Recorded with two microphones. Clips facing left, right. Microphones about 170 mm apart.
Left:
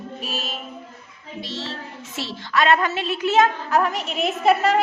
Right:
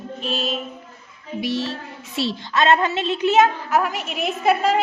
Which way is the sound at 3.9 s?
Centre (ahead or behind).